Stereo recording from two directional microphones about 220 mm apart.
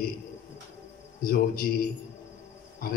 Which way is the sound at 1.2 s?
40° left (ahead or behind).